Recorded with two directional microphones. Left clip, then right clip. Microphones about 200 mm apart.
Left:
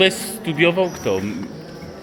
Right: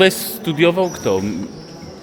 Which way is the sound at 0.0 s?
30° right (ahead or behind).